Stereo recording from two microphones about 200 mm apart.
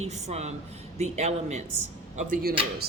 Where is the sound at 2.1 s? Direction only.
45° right (ahead or behind).